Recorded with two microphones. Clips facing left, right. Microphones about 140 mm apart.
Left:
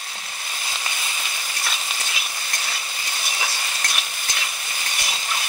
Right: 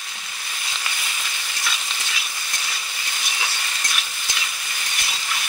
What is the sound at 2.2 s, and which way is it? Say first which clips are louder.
Stir: left 2 dB; 25° left (ahead or behind).